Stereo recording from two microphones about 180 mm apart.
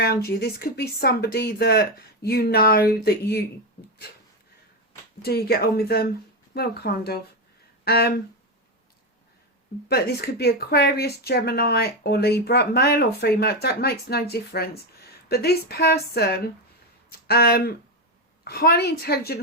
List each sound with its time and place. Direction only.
0.0 s speech: 60° left (ahead or behind)
5.2 s speech: 60° left (ahead or behind)
9.9 s speech: 60° left (ahead or behind)